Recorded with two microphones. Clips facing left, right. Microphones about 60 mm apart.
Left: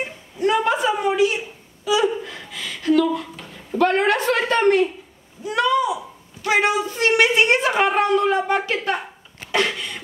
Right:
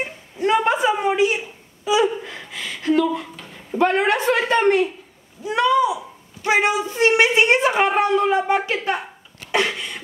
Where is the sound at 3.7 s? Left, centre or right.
Centre.